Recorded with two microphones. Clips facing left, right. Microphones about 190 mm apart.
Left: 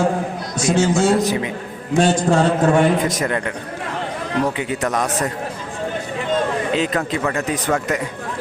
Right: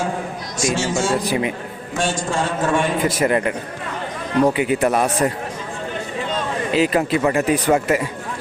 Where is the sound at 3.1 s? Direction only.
10° right (ahead or behind).